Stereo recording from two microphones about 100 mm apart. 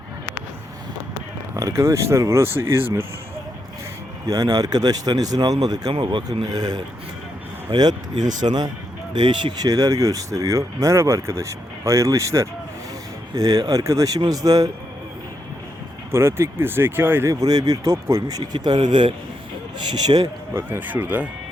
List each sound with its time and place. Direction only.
1.5 s speech: 35° right (ahead or behind)
4.3 s speech: 40° right (ahead or behind)
5.9 s speech: 55° right (ahead or behind)
6.4 s speech: 40° right (ahead or behind)
16.1 s speech: 25° right (ahead or behind)
17.4 s speech: 40° right (ahead or behind)
20.5 s speech: 20° right (ahead or behind)